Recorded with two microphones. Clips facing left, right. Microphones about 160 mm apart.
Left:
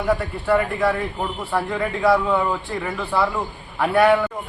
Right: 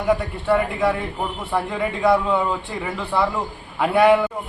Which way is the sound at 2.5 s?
Centre (ahead or behind).